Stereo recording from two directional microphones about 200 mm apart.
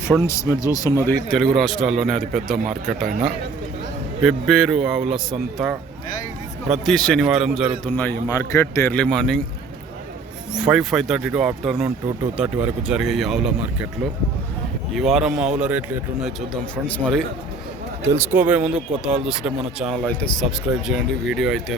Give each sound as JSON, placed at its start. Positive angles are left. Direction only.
{"t": 0.3, "sound": "a man's voice", "side_deg": 15}
{"t": 3.1, "sound": "a man's voice", "side_deg": -40}
{"t": 4.2, "sound": "a man's voice", "side_deg": 0}
{"t": 7.9, "sound": "a man's voice", "side_deg": 10}
{"t": 10.6, "sound": "a man's voice", "side_deg": -5}
{"t": 14.9, "sound": "a man's voice", "side_deg": 0}
{"t": 16.8, "sound": "a man's voice", "side_deg": 5}
{"t": 18.0, "sound": "a man's voice", "side_deg": -10}